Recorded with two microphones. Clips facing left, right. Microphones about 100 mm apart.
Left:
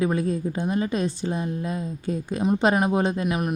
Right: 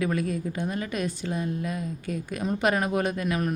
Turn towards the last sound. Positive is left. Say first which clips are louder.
# left 3 dB
turn(degrees=20)  # may be behind; listen again after turning